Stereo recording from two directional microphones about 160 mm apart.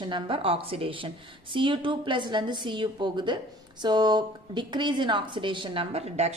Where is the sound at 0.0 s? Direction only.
30° right (ahead or behind).